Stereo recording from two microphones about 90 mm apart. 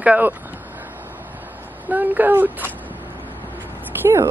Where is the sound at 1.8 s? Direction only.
20° right (ahead or behind).